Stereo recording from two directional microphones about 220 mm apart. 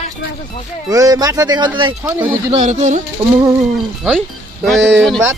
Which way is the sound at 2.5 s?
35° right (ahead or behind).